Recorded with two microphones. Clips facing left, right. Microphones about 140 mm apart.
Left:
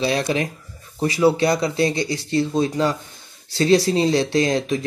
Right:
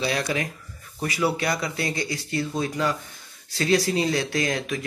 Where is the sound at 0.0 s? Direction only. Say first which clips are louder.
Left 5 dB; 25° left (ahead or behind).